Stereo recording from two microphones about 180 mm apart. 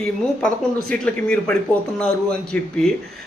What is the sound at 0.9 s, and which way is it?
A man's voice, 5° left (ahead or behind).